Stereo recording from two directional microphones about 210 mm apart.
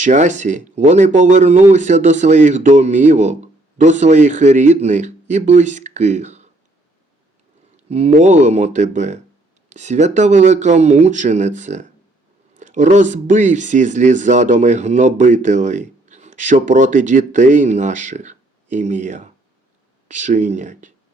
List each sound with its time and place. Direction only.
0.0 s speech: 35° right (ahead or behind)
7.9 s speech: 30° right (ahead or behind)